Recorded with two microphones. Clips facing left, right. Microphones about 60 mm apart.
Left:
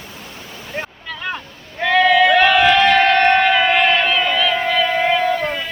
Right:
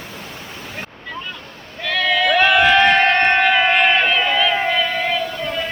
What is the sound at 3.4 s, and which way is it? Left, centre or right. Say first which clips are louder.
Crowd: left 1 dB; centre.